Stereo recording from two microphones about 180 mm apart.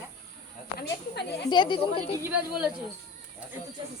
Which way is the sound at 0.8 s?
65° left (ahead or behind).